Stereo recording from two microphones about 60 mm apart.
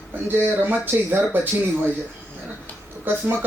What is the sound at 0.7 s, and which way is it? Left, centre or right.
Speech, right.